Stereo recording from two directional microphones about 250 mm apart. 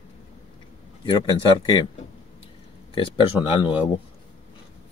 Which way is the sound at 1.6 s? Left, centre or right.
Centre.